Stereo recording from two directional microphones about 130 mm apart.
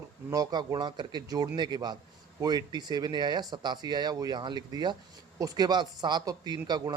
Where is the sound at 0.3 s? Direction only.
30° right (ahead or behind).